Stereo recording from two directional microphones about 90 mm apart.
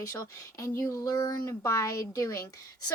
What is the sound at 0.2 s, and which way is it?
Speech, 35° left (ahead or behind).